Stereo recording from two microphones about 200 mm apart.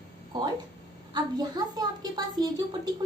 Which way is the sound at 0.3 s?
20° right (ahead or behind).